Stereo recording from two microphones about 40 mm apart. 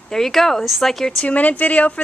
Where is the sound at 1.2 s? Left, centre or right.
Left.